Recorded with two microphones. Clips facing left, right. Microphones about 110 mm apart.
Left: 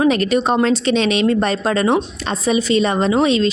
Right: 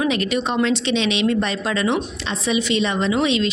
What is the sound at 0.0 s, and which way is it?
Speech, 40° left (ahead or behind).